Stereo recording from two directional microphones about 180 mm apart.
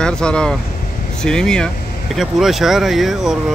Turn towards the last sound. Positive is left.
turn(degrees=0)  # may be behind; listen again after turning